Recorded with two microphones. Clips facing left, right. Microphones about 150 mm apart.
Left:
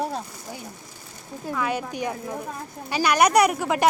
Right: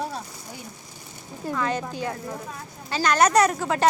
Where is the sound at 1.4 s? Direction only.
10° left (ahead or behind).